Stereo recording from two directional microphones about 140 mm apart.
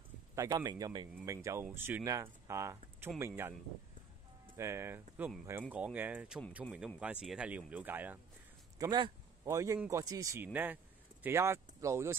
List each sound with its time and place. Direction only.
0.4 s speech: 25° right (ahead or behind)
4.6 s speech: 20° right (ahead or behind)
8.7 s a sound: 30° right (ahead or behind)
9.5 s speech: 25° right (ahead or behind)